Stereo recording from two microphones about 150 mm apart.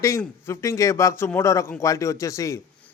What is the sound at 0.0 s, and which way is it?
A man's voice, 20° left (ahead or behind).